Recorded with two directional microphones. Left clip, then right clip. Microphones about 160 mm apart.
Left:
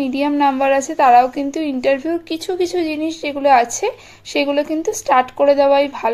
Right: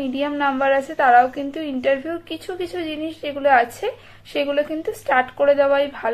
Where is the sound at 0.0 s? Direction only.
30° left (ahead or behind).